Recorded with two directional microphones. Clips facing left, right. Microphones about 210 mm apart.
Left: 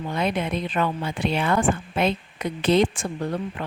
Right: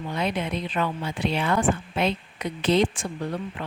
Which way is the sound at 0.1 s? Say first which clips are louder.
Left 2 dB; 50° left (ahead or behind).